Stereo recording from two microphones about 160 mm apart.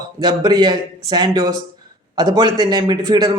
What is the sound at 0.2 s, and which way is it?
A man's voice, 25° right (ahead or behind).